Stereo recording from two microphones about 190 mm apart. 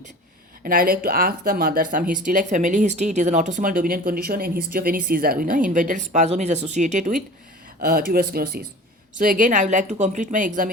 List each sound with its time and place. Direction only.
0.6 s speech: 50° right (ahead or behind)